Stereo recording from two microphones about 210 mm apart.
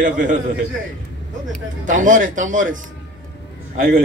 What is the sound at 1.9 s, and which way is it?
Speech, 40° right (ahead or behind).